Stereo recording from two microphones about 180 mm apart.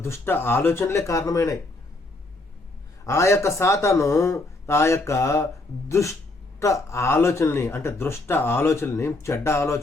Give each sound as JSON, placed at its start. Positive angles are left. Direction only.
{"t": 0.0, "sound": "speech", "side_deg": 15}
{"t": 3.1, "sound": "speech", "side_deg": 15}